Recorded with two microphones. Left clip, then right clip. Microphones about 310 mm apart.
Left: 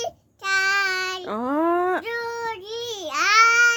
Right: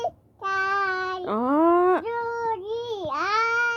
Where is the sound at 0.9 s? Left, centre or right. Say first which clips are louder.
Left 2 dB; left.